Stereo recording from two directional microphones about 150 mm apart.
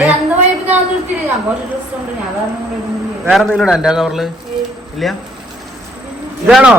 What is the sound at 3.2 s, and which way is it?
A man's voice, centre (ahead or behind).